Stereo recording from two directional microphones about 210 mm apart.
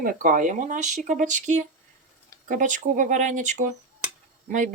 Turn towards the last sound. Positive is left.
turn(degrees=-40)  # may be behind; listen again after turning